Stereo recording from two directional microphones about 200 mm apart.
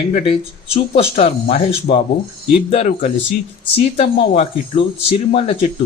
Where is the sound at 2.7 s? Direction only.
35° left (ahead or behind).